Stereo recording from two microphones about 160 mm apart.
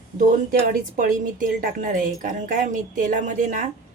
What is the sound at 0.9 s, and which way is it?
A woman's voice, 55° right (ahead or behind).